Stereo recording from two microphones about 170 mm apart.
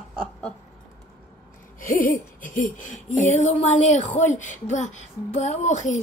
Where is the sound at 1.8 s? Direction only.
55° left (ahead or behind).